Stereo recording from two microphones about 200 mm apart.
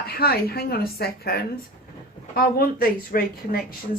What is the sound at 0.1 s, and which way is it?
Speech, 50° left (ahead or behind).